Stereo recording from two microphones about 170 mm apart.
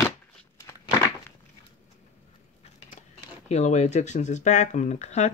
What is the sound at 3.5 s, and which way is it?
Speech, 40° left (ahead or behind).